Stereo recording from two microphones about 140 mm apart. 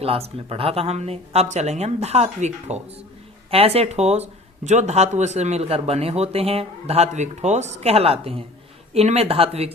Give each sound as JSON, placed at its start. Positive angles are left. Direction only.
{"t": 0.0, "sound": "speech", "side_deg": -45}